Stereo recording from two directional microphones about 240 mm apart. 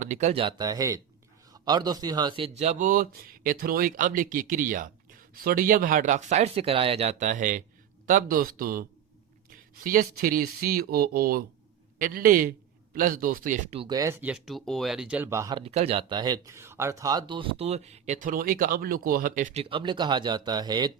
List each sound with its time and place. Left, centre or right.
0.0 s speech: right